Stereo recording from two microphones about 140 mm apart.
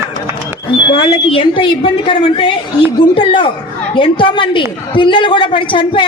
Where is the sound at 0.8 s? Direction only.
35° left (ahead or behind).